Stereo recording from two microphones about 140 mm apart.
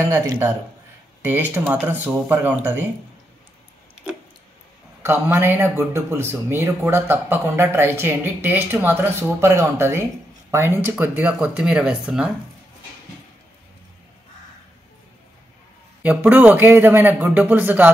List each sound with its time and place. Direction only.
0.0 s speech: 15° right (ahead or behind)
5.0 s speech: 15° right (ahead or behind)
16.0 s speech: 15° right (ahead or behind)